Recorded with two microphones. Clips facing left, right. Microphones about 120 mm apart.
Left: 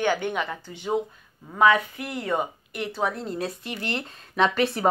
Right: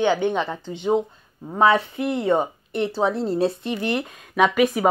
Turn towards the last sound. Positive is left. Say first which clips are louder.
# right 4 dB
turn(degrees=-10)  # may be behind; listen again after turning